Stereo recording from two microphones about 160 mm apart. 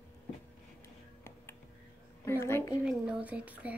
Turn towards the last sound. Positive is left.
turn(degrees=-10)  # may be behind; listen again after turning